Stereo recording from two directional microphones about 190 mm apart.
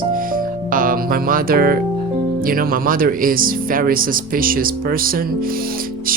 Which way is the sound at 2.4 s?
50° right (ahead or behind).